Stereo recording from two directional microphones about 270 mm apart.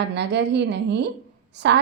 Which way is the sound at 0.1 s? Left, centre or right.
Right.